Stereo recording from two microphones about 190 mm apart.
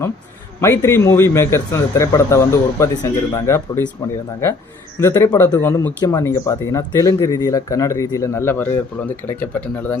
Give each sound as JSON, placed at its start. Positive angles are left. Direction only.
{"t": 0.6, "sound": "speech", "side_deg": 15}
{"t": 4.9, "sound": "speech", "side_deg": 15}